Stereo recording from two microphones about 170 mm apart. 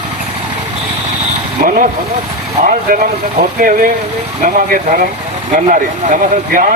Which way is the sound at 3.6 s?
55° right (ahead or behind).